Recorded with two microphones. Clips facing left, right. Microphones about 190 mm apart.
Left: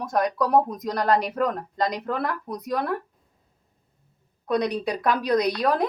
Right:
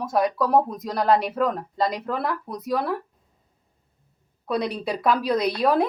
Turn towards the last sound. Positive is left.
turn(degrees=-5)  # may be behind; listen again after turning